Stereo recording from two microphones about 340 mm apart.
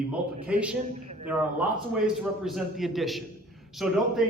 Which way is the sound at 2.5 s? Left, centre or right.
Centre.